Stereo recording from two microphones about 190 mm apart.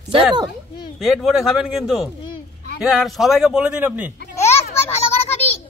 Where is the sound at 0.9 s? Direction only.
Centre (ahead or behind).